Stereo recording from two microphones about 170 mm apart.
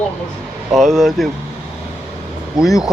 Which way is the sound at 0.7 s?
Centre (ahead or behind).